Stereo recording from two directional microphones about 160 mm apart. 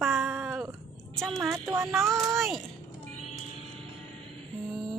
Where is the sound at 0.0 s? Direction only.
Centre (ahead or behind).